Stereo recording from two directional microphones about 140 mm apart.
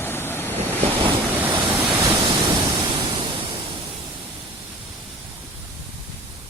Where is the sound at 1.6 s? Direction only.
15° right (ahead or behind).